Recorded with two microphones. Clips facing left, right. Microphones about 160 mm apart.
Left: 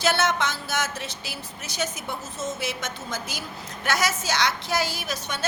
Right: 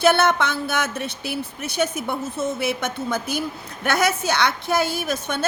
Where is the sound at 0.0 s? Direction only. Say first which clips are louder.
Right 6 dB; 55° right (ahead or behind).